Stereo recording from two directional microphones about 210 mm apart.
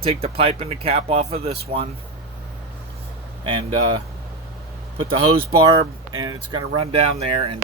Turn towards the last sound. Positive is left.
turn(degrees=-25)  # may be behind; listen again after turning